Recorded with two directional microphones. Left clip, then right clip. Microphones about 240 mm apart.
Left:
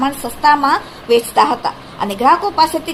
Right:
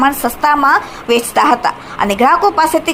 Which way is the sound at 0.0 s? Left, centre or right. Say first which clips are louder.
Right 2 dB; centre.